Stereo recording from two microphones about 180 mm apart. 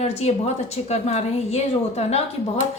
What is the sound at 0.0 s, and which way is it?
A woman's voice, 35° left (ahead or behind).